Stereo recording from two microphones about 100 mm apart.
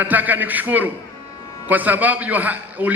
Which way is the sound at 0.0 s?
15° right (ahead or behind).